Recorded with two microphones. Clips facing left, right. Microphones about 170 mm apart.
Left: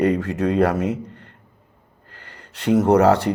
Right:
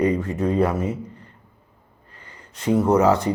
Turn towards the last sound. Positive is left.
turn(degrees=65)  # may be behind; listen again after turning